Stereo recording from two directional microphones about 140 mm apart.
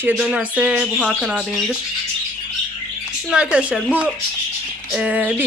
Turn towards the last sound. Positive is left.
turn(degrees=-10)  # may be behind; listen again after turning